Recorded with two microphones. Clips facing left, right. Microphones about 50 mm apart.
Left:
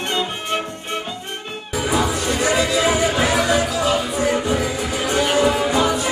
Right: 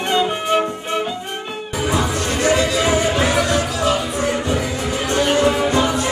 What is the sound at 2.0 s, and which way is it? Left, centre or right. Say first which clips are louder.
Music: left 1 dB; centre.